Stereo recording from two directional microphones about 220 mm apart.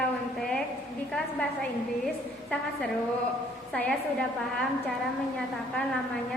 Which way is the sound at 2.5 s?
5° left (ahead or behind).